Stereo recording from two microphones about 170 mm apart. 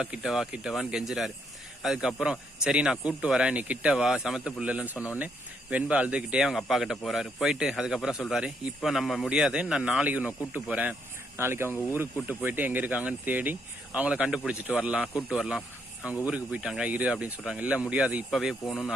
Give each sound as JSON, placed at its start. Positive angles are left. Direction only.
{"t": 0.0, "sound": "speech", "side_deg": -5}
{"t": 4.9, "sound": "speech", "side_deg": 15}
{"t": 5.7, "sound": "speech", "side_deg": -5}